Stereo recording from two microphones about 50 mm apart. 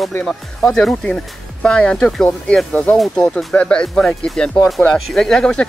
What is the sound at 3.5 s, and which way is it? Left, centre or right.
Speech, left.